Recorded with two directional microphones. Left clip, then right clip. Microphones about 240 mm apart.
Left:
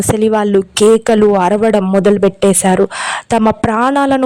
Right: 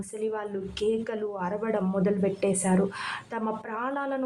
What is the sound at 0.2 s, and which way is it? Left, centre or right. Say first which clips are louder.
A woman's voice: left 17 dB; left.